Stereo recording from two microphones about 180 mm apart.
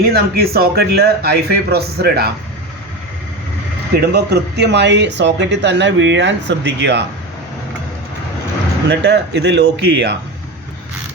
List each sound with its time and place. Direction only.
0.1 s speech: 60° right (ahead or behind)
3.9 s speech: 65° right (ahead or behind)
8.9 s speech: 70° right (ahead or behind)